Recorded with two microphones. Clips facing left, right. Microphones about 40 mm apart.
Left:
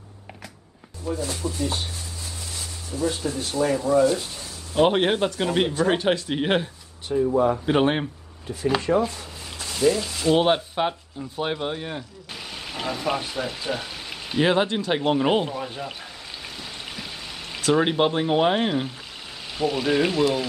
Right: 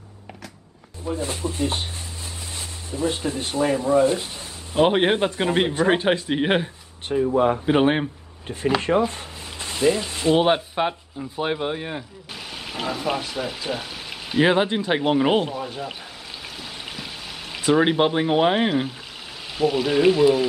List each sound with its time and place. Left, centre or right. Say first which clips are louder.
1.0 s speech: right 1 dB; right
4.7 s speech: right 1 dB; centre
7.1 s speech: right 1 dB; right
7.6 s speech: right 2 dB; centre
9.0 s a sound: right 2 dB; right
10.3 s speech: right 1 dB; centre
16.8 s a sound: right 1 dB; centre
17.6 s speech: right 2 dB; centre